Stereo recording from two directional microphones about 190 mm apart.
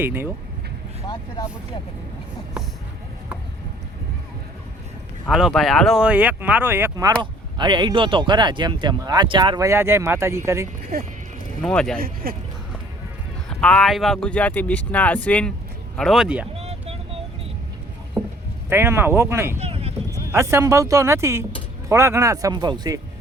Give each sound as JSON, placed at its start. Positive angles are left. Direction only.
{"t": 0.0, "sound": "speech", "side_deg": -10}
{"t": 1.0, "sound": "speech", "side_deg": 20}
{"t": 5.3, "sound": "speech", "side_deg": 0}
{"t": 11.6, "sound": "speech", "side_deg": 5}
{"t": 12.0, "sound": "speech", "side_deg": -50}
{"t": 13.5, "sound": "speech", "side_deg": 5}
{"t": 16.6, "sound": "vehicle", "side_deg": -35}
{"t": 18.2, "sound": "rowboat", "side_deg": -15}
{"t": 18.7, "sound": "speech", "side_deg": -10}
{"t": 19.5, "sound": "a sound", "side_deg": -30}
{"t": 20.1, "sound": "speech", "side_deg": -15}